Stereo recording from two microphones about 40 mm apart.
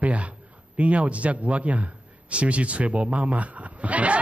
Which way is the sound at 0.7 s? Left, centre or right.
Right.